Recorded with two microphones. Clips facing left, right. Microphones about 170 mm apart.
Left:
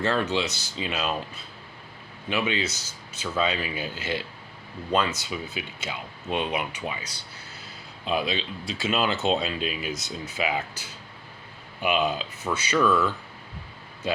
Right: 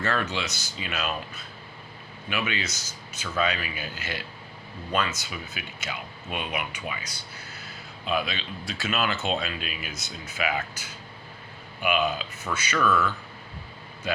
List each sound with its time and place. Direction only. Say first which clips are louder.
0.0 s speech: left 4 dB; 30° left (ahead or behind)
2.3 s speech: left 4 dB; 25° left (ahead or behind)
8.0 s speech: left 2 dB; 30° left (ahead or behind)